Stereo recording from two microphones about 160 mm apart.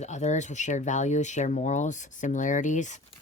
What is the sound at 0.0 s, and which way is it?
Speech, 45° left (ahead or behind).